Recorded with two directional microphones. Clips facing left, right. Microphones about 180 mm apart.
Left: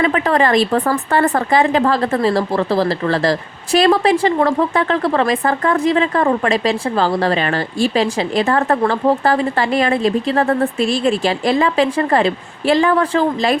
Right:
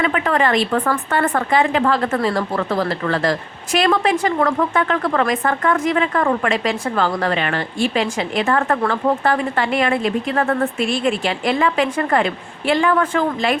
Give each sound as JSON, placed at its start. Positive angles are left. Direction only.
{"t": 0.0, "sound": "a woman's voice", "side_deg": 35}